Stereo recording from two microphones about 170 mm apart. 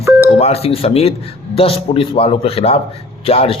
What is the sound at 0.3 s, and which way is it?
Speech, 40° left (ahead or behind).